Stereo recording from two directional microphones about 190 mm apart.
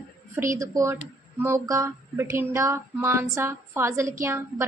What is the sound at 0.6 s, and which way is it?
A woman's voice, 15° right (ahead or behind).